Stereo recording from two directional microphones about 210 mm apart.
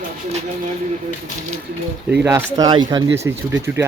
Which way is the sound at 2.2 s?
15° right (ahead or behind).